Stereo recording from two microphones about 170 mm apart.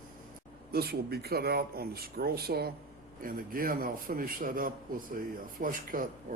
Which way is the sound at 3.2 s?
55° right (ahead or behind).